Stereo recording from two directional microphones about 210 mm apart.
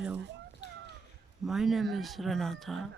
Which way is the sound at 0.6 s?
55° left (ahead or behind).